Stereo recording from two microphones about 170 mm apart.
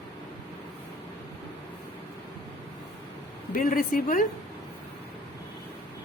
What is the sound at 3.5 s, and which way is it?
Speech, 55° left (ahead or behind).